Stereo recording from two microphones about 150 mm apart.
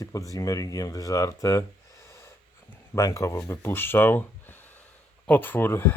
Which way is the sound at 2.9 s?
20° left (ahead or behind).